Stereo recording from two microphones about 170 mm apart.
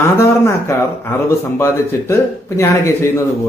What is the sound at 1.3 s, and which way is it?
A man's voice, 15° left (ahead or behind).